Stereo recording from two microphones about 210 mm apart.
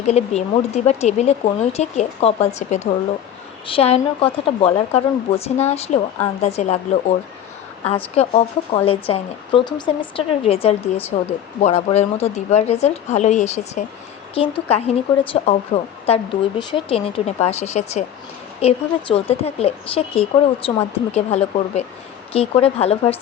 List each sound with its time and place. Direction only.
0.1 s a woman's voice: 30° left (ahead or behind)
8.1 s a woman's voice: 30° left (ahead or behind)